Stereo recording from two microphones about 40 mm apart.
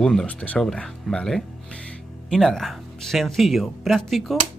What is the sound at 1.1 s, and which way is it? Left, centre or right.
Speech, centre.